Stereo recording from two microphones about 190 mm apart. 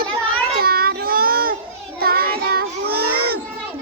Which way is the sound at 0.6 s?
55° right (ahead or behind).